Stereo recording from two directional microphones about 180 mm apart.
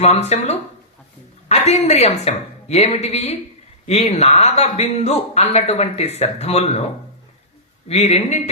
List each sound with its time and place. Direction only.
0.0 s a woman's voice: 35° left (ahead or behind)
7.9 s speech: 35° left (ahead or behind)